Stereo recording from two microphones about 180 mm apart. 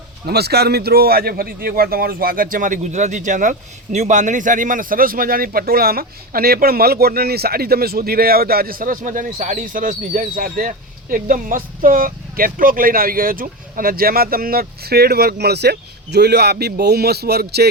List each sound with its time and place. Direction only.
0.3 s a man's voice: 65° right (ahead or behind)